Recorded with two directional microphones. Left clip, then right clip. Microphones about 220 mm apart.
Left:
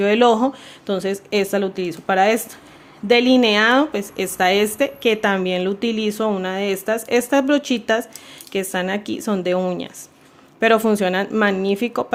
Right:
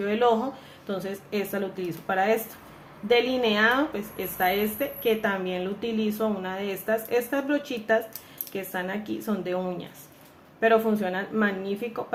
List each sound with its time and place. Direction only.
0.0 s a woman's voice: 45° left (ahead or behind)